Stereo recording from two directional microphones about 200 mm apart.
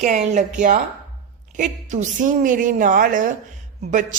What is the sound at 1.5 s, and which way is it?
A woman's voice, 40° right (ahead or behind).